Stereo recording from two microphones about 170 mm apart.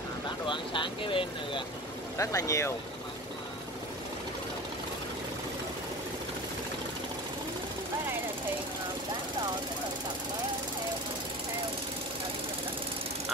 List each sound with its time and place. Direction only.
0.5 s speech: 30° left (ahead or behind)
2.1 s speech: 20° left (ahead or behind)